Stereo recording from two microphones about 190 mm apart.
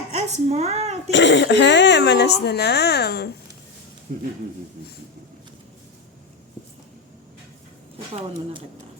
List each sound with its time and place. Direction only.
0.1 s speech: 35° right (ahead or behind)
1.1 s speech: 70° left (ahead or behind)